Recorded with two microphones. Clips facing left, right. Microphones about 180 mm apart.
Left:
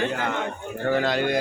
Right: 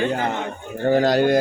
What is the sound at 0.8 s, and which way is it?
Speech, 40° right (ahead or behind).